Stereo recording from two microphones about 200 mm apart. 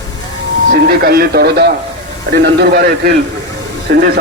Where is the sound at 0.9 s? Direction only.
50° right (ahead or behind).